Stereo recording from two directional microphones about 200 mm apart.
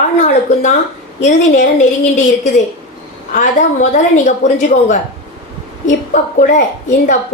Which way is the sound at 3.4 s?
35° left (ahead or behind).